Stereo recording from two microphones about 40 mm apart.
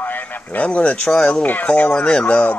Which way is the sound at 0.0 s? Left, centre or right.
Left.